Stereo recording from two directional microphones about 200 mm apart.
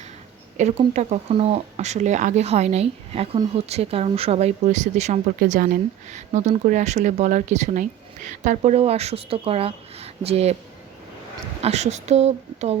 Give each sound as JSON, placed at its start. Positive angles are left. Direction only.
{"t": 0.5, "sound": "speech", "side_deg": -35}
{"t": 11.6, "sound": "speech", "side_deg": -35}